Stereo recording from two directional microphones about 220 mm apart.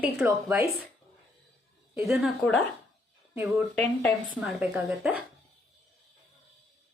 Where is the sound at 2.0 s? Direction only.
5° left (ahead or behind).